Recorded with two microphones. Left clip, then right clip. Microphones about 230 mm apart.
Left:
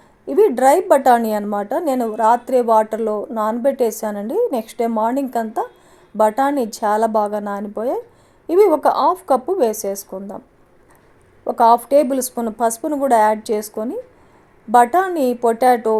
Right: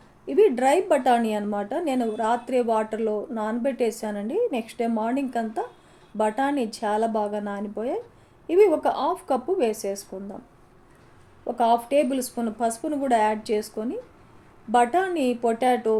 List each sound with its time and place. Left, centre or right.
0.3 s speech: left
11.4 s speech: left